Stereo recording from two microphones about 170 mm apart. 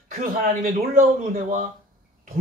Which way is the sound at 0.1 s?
50° right (ahead or behind).